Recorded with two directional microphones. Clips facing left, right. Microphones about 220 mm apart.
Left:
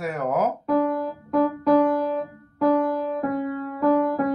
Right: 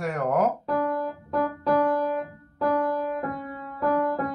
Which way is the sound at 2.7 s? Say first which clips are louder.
Left 3 dB; 15° left (ahead or behind).